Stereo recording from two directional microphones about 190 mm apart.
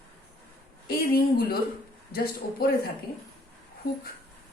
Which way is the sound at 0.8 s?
55° left (ahead or behind).